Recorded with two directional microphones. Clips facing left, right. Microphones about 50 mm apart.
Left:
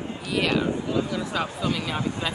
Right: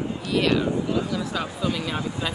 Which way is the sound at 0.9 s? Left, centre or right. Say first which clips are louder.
Even; centre.